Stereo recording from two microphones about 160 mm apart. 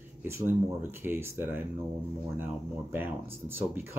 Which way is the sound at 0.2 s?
15° right (ahead or behind).